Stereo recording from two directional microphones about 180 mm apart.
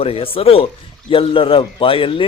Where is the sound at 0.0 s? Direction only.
30° left (ahead or behind).